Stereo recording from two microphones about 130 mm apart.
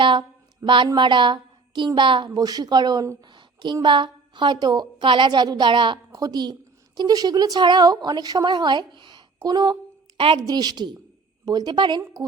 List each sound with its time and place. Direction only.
0.0 s a sound: 40° right (ahead or behind)
0.9 s a woman's voice: 35° right (ahead or behind)
10.2 s a woman's voice: 40° right (ahead or behind)
10.4 s a woman's voice: 30° right (ahead or behind)